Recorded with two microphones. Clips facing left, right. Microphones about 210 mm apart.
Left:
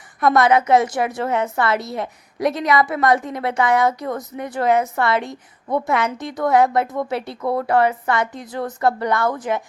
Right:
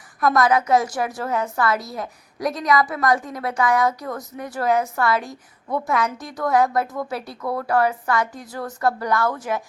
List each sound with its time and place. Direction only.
0.3 s a woman's voice: 25° left (ahead or behind)